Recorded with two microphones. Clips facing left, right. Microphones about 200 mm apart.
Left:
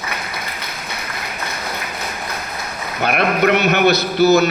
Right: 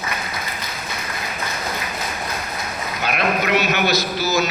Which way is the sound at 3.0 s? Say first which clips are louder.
Left 5 dB; 60° left (ahead or behind).